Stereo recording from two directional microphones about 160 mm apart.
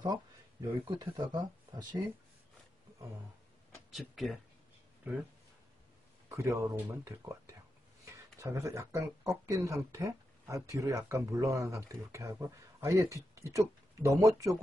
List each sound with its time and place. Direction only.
0.0 s speech: 25° right (ahead or behind)
3.9 s speech: centre (ahead or behind)
6.2 s speech: 15° right (ahead or behind)